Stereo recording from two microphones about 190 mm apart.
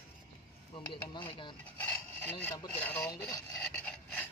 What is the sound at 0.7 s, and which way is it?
Speech, 25° left (ahead or behind).